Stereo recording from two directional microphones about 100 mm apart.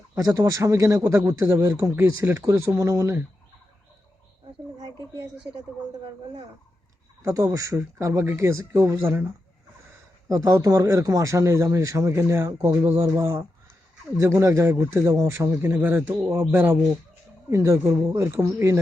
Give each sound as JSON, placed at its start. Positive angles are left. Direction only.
{"t": 0.2, "sound": "a man's voice", "side_deg": -35}
{"t": 7.2, "sound": "a man's voice", "side_deg": -30}
{"t": 10.2, "sound": "a man's voice", "side_deg": -35}